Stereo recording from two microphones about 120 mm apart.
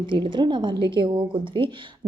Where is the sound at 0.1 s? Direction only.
40° right (ahead or behind).